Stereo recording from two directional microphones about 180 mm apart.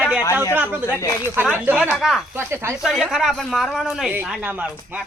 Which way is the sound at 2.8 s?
Centre (ahead or behind).